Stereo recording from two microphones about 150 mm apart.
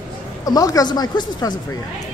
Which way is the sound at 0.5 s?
25° left (ahead or behind).